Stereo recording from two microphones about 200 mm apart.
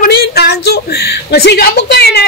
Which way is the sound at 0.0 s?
50° left (ahead or behind).